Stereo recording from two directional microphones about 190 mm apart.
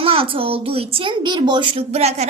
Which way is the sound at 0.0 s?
30° right (ahead or behind).